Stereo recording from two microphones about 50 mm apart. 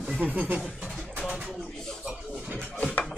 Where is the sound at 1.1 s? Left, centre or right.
Right.